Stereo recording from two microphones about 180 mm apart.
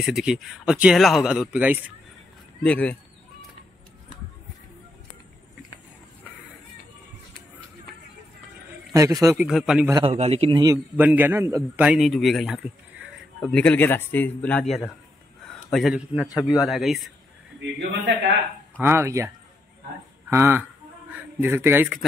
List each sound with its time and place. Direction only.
0.0 s speech: 5° right (ahead or behind)
2.6 s a man's voice: 5° left (ahead or behind)
9.4 s speech: centre (ahead or behind)
10.0 s a man's voice: 35° right (ahead or behind)
10.6 s a man's voice: 15° right (ahead or behind)
15.4 s a sound: centre (ahead or behind)
16.3 s a man's voice: 20° left (ahead or behind)
16.6 s speech: centre (ahead or behind)
17.6 s a sound: 70° right (ahead or behind)
18.8 s a man's voice: 15° right (ahead or behind)